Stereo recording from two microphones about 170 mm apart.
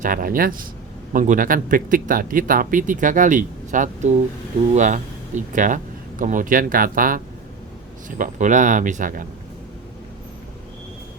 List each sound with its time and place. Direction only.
0.0 s a man's voice: 55° right (ahead or behind)
8.2 s speech: 50° right (ahead or behind)